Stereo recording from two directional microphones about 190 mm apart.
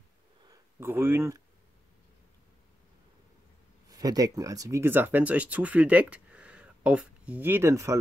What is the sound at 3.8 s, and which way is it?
Speech, 20° right (ahead or behind).